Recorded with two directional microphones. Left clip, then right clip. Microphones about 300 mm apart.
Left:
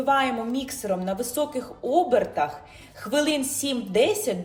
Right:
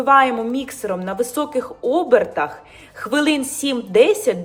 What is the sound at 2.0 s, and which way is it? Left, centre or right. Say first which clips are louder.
A woman's voice: right 6 dB; centre.